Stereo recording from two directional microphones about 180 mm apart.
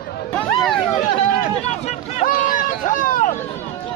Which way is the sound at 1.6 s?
35° left (ahead or behind).